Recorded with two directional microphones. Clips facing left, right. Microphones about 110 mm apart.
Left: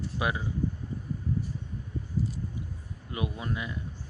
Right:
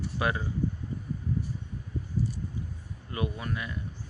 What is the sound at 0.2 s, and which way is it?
Speech, 10° left (ahead or behind).